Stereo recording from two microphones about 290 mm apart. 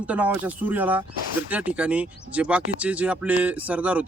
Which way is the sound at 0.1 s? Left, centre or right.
Centre.